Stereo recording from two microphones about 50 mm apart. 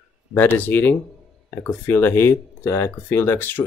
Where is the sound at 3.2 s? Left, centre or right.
Left.